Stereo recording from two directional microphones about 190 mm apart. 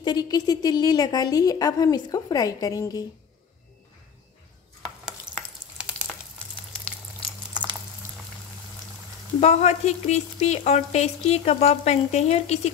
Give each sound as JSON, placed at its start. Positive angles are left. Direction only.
{"t": 0.0, "sound": "a woman's voice", "side_deg": 20}
{"t": 5.3, "sound": "stir", "side_deg": -25}
{"t": 5.8, "sound": "frying", "side_deg": -5}
{"t": 9.4, "sound": "speech", "side_deg": 35}